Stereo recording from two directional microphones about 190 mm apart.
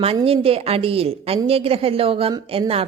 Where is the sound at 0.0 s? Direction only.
30° right (ahead or behind).